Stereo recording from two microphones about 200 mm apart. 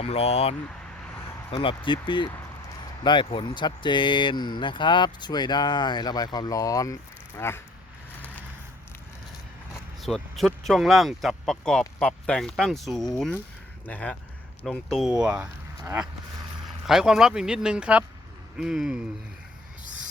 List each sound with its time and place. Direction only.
0.0 s speech: 30° left (ahead or behind); by 7.6 s 10° left (ahead or behind)
10.0 s speech: centre (ahead or behind)
19.8 s music: 40° right (ahead or behind)